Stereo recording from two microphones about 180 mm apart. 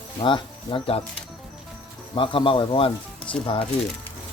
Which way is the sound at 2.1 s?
30° left (ahead or behind).